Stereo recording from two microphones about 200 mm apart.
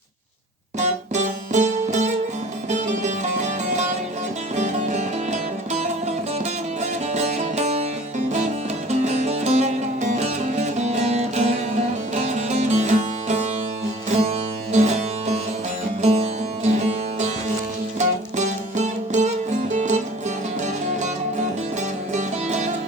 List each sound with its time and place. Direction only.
1.5 s music: 35° right (ahead or behind)
4.5 s music: 35° right (ahead or behind)
7.1 s music: 35° right (ahead or behind)
9.0 s music: 35° right (ahead or behind)
18.3 s music: 35° right (ahead or behind)
22.1 s music: 35° right (ahead or behind)